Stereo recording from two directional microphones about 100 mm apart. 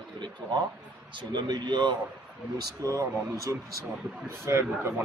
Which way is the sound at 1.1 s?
50° right (ahead or behind).